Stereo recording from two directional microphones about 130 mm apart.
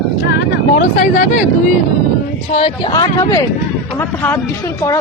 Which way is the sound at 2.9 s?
35° left (ahead or behind).